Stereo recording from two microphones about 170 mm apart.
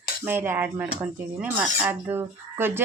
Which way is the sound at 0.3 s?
15° right (ahead or behind).